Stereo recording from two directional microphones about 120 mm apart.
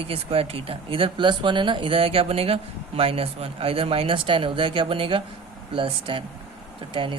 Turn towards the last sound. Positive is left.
turn(degrees=-45)  # may be behind; listen again after turning